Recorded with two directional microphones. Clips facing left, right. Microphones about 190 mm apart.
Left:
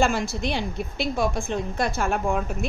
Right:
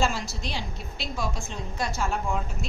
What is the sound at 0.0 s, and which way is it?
A woman's voice, 55° left (ahead or behind).